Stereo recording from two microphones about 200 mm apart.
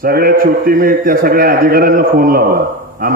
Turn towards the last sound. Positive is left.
turn(degrees=-50)  # may be behind; listen again after turning